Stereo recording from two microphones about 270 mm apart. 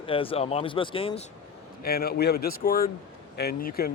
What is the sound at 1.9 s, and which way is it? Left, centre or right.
Speech, left.